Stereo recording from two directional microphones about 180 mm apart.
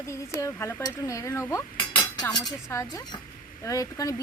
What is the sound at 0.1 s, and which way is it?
A woman's voice, 15° left (ahead or behind).